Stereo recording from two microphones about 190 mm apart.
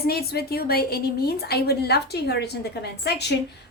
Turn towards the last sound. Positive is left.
turn(degrees=60)  # may be behind; listen again after turning